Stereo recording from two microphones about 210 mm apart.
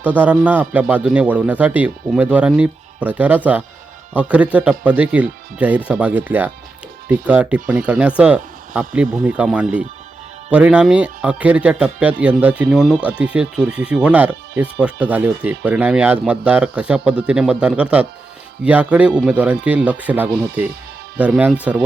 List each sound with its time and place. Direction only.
0.0 s a man's voice: 10° right (ahead or behind)